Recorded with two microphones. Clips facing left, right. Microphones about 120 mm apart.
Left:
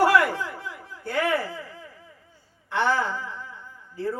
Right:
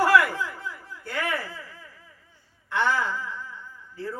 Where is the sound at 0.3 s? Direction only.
60° left (ahead or behind).